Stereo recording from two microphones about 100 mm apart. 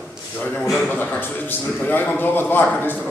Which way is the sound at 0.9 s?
20° left (ahead or behind).